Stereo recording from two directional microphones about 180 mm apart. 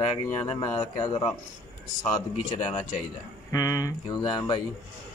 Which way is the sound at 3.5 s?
20° left (ahead or behind).